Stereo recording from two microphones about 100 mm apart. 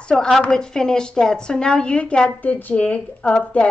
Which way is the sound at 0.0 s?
5° left (ahead or behind).